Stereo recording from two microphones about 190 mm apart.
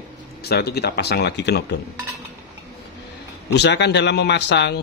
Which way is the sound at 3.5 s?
65° left (ahead or behind).